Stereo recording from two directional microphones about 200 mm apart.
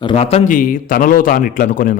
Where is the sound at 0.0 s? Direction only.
30° left (ahead or behind).